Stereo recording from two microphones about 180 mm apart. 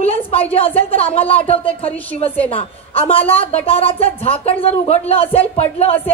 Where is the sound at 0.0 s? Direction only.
30° left (ahead or behind).